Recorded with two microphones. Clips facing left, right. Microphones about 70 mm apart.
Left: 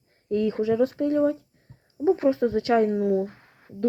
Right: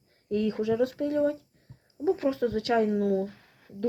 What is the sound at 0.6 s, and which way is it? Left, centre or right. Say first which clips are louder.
Speech: left 4 dB; centre.